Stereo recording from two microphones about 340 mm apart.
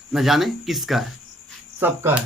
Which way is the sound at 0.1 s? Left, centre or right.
Centre.